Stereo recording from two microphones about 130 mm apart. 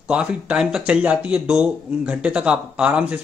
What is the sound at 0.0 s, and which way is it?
Speech, 5° right (ahead or behind).